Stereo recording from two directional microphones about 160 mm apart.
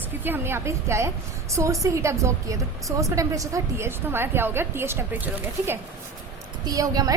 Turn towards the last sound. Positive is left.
turn(degrees=-20)  # may be behind; listen again after turning